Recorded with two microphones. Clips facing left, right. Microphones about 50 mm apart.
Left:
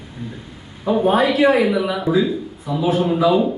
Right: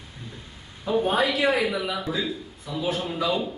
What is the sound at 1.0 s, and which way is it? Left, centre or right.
A man's voice, centre.